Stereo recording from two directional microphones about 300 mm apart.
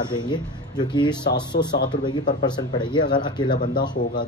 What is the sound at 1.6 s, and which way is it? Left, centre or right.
Speech, left.